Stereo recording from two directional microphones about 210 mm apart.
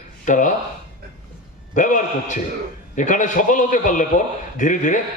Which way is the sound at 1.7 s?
35° left (ahead or behind).